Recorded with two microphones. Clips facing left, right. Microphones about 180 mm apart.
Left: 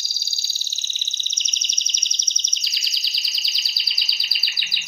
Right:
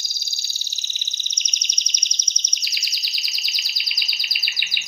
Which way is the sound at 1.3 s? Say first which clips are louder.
Even; 15° right (ahead or behind).